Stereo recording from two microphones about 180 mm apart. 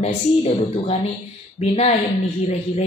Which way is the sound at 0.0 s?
35° left (ahead or behind).